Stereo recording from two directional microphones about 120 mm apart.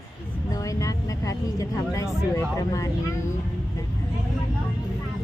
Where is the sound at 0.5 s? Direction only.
30° left (ahead or behind).